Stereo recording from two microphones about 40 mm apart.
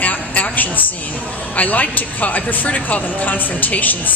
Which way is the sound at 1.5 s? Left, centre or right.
Left.